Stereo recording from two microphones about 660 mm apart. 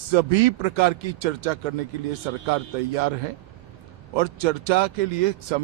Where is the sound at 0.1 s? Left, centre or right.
Right.